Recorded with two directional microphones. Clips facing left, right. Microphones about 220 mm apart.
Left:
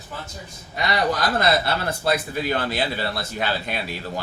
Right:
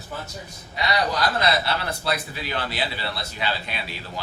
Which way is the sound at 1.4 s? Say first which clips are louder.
Left 2 dB; 50° left (ahead or behind).